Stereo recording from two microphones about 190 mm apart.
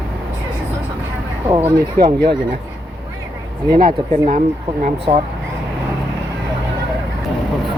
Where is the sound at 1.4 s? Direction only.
15° right (ahead or behind).